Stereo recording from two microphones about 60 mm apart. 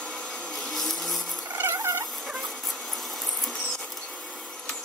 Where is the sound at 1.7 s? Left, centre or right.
Right.